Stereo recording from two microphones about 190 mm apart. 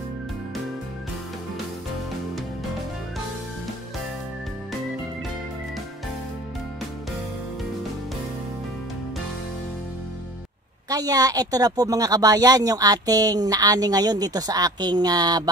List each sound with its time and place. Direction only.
10.9 s a woman's voice: 20° right (ahead or behind)